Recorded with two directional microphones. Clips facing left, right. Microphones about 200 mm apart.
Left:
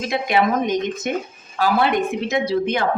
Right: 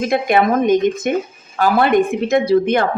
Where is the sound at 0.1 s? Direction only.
50° right (ahead or behind).